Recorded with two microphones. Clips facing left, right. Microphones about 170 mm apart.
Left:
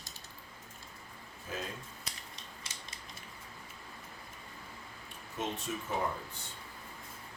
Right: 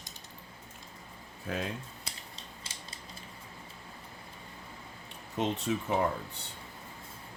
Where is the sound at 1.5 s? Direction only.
65° right (ahead or behind).